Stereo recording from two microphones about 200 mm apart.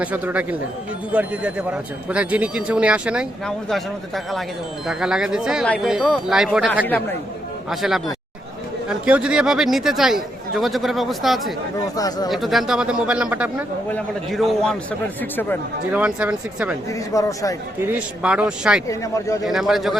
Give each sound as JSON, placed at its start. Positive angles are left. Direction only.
{"t": 0.0, "sound": "speech", "side_deg": -5}
{"t": 6.8, "sound": "speech", "side_deg": 10}
{"t": 7.7, "sound": "speech", "side_deg": 0}
{"t": 9.0, "sound": "speech", "side_deg": -5}
{"t": 11.9, "sound": "speech", "side_deg": 20}
{"t": 12.3, "sound": "speech", "side_deg": 0}
{"t": 15.9, "sound": "speech", "side_deg": -5}
{"t": 17.2, "sound": "speech", "side_deg": 15}
{"t": 17.7, "sound": "speech", "side_deg": -10}
{"t": 18.9, "sound": "speech", "side_deg": 15}
{"t": 19.5, "sound": "speech", "side_deg": 0}